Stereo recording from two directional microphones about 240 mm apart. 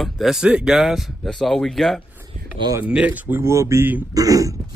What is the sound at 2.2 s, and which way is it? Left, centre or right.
Speech, centre.